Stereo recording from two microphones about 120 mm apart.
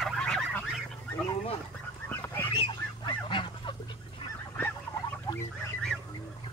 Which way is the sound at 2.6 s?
40° left (ahead or behind).